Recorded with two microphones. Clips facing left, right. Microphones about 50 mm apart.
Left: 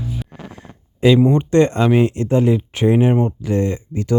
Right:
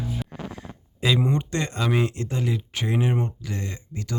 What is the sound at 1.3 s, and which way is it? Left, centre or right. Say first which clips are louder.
Speech: left 12 dB; left.